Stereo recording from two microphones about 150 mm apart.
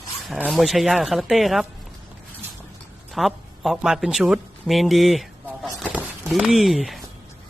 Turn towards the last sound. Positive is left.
turn(degrees=0)  # may be behind; listen again after turning